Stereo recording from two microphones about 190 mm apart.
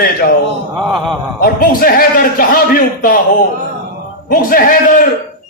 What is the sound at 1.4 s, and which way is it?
Speech, 50° left (ahead or behind).